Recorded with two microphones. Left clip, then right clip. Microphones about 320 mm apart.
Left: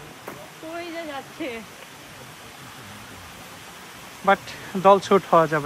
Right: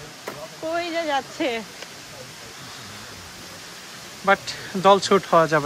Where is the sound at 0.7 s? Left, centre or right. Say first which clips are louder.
Right 9 dB; right.